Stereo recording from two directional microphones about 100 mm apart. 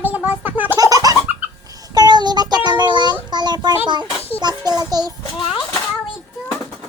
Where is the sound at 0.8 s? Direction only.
35° right (ahead or behind).